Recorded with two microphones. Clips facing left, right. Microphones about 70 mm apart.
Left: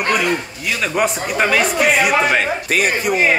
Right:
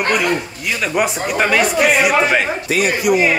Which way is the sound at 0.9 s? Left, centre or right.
Centre.